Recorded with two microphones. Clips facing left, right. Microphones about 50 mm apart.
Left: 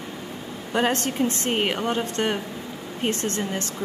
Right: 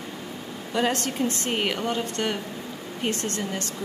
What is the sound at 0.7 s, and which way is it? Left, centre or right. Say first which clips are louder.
A woman's voice: left 2 dB; left.